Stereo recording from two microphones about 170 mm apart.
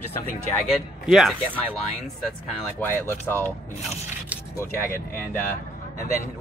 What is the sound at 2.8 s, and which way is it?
Speech, 10° left (ahead or behind).